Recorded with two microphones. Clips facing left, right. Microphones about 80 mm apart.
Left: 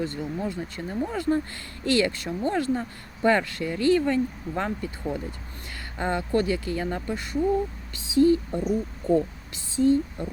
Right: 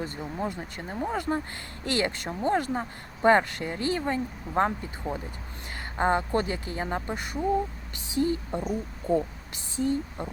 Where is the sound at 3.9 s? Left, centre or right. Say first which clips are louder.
Left 8 dB; right.